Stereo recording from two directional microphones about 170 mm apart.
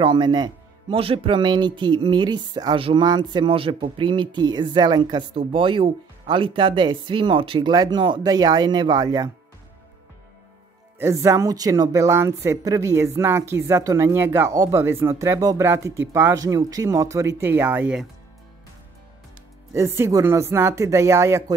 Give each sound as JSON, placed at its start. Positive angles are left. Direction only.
{"t": 0.0, "sound": "speech", "side_deg": -25}
{"t": 11.0, "sound": "speech", "side_deg": -15}
{"t": 19.7, "sound": "speech", "side_deg": -15}